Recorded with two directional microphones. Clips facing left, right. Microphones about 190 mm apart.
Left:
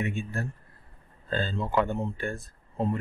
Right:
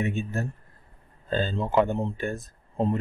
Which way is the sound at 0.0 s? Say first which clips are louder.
Right 3 dB; 20° right (ahead or behind).